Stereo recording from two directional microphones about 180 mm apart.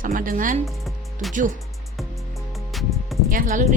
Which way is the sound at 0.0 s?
50° right (ahead or behind).